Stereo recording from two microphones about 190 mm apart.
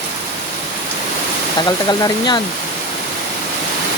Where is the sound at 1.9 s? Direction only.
20° left (ahead or behind).